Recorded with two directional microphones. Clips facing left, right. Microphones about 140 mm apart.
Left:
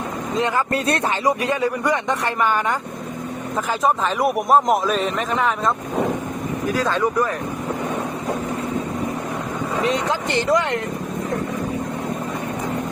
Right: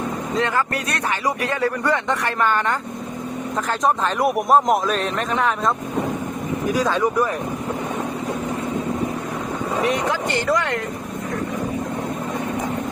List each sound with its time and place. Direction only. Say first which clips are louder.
0.3 s speech: left 2 dB; 20° left (ahead or behind)
3.8 s speech: even; centre (ahead or behind)
6.7 s speech: right 1 dB; 10° right (ahead or behind)
9.8 s speech: even; 20° left (ahead or behind)